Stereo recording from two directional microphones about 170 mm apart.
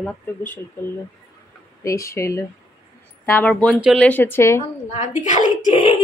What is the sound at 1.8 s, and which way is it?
Speech, 15° left (ahead or behind).